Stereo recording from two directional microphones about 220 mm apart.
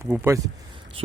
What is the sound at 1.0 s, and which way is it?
Speech, 25° right (ahead or behind).